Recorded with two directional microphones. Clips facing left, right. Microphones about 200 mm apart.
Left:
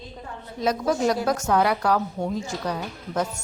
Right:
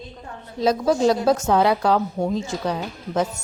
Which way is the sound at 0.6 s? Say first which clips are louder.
Right 4 dB; 30° right (ahead or behind).